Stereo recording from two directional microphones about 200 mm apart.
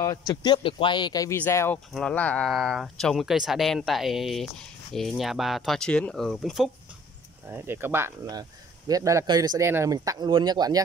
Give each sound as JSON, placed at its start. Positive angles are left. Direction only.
{"t": 0.0, "sound": "speech", "side_deg": 15}
{"t": 7.4, "sound": "speech", "side_deg": -10}